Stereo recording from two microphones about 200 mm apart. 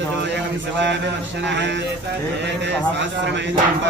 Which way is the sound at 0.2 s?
60° right (ahead or behind).